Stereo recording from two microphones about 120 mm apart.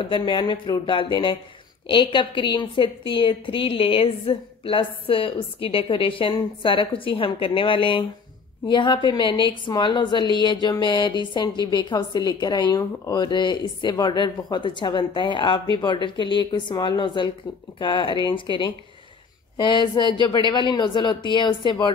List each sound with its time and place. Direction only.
0.0 s a woman's voice: 45° left (ahead or behind)